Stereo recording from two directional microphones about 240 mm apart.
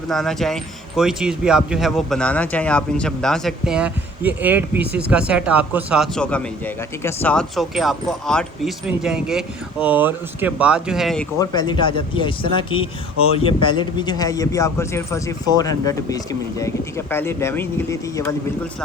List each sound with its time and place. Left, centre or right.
0.1 s speech: centre
11.3 s speech: centre